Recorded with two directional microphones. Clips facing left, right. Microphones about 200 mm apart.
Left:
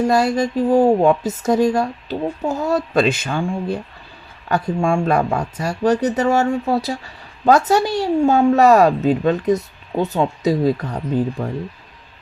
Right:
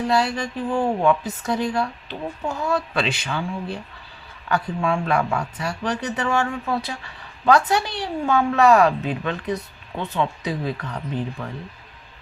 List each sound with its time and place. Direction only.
0.0 s speech: 45° left (ahead or behind)